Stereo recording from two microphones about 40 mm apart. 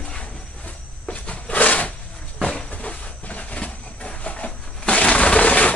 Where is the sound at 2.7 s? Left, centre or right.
Left.